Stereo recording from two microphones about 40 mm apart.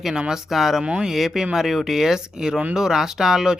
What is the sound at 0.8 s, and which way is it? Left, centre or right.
Speech, right.